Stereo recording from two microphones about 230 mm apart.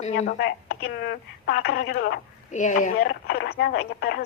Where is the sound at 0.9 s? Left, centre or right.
Left.